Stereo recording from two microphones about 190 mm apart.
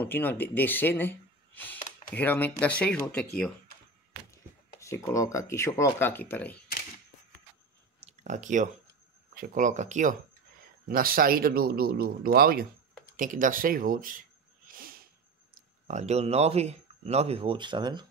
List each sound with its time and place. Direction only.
0.0 s speech: 10° left (ahead or behind)
1.8 s a sound: 40° left (ahead or behind)
2.1 s speech: 10° left (ahead or behind)
4.3 s speech: 15° left (ahead or behind)
8.0 s chewing: 40° right (ahead or behind)
9.3 s speech: 45° right (ahead or behind)
10.9 s speech: 50° right (ahead or behind)
14.7 s a sound: 50° right (ahead or behind)
15.9 s speech: 35° right (ahead or behind)